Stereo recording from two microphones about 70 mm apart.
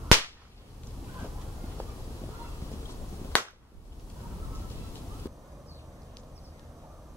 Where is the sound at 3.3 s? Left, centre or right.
Left.